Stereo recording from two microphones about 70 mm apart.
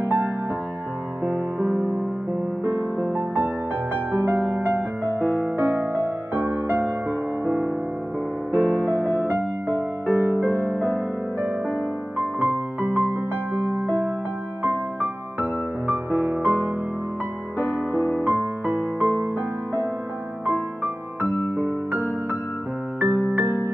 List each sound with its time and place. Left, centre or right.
0.0 s music: right
1.7 s music: centre
3.3 s music: right
8.5 s music: right
8.8 s music: centre
10.0 s music: centre
12.2 s music: right
15.9 s music: right
17.6 s music: left
18.4 s music: right
20.4 s music: right